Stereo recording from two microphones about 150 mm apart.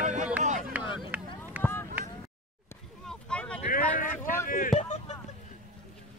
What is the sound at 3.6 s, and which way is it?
Vehicle, 65° left (ahead or behind).